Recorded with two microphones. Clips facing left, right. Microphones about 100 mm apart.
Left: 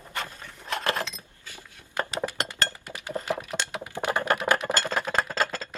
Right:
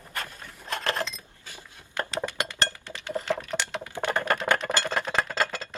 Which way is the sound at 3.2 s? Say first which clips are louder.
Right 1 dB; 15° left (ahead or behind).